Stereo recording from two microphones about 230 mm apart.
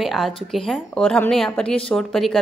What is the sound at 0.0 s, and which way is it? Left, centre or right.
Speech, centre.